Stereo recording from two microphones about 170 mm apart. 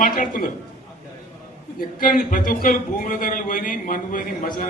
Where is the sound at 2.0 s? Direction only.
55° left (ahead or behind).